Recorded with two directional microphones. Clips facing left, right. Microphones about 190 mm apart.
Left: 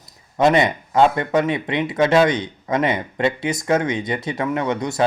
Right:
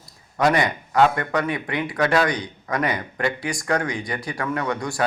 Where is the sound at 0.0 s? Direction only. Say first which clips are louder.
Left 4 dB; 25° left (ahead or behind).